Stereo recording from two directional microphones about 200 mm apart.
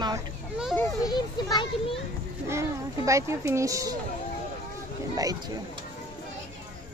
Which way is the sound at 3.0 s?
15° right (ahead or behind).